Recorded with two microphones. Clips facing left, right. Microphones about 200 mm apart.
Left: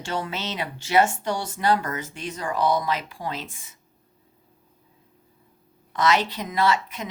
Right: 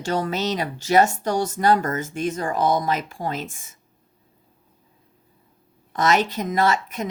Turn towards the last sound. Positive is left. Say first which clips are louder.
# right 2 dB
turn(degrees=-45)  # may be behind; listen again after turning